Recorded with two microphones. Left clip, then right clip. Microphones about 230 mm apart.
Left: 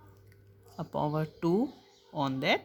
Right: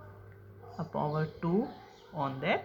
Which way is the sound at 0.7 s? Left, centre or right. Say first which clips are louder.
Left 1 dB; left.